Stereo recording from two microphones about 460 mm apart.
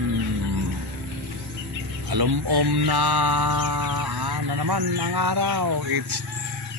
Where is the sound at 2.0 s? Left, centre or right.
Right.